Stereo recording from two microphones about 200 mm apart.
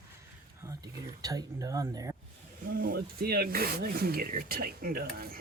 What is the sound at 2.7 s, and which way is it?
Rub, 45° right (ahead or behind).